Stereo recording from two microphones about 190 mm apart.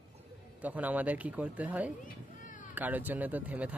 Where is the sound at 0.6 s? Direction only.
10° right (ahead or behind).